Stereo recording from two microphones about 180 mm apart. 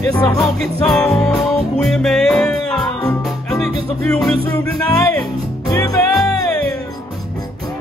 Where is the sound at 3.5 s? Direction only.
5° left (ahead or behind).